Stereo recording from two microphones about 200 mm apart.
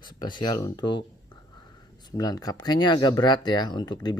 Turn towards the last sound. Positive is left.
turn(degrees=20)  # may be behind; listen again after turning